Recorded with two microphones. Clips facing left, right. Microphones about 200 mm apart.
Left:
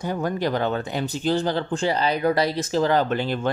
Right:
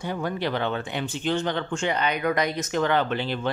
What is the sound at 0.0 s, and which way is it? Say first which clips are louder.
Speech: left 3 dB; 40° left (ahead or behind).